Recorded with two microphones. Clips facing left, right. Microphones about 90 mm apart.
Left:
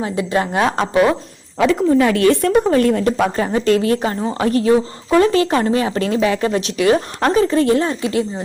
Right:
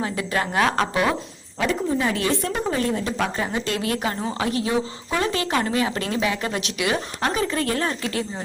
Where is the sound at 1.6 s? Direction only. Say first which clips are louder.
Left 9 dB; 85° left; by 3.4 s 50° left (ahead or behind).